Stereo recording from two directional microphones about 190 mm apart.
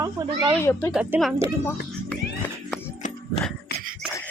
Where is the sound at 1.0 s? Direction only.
5° right (ahead or behind).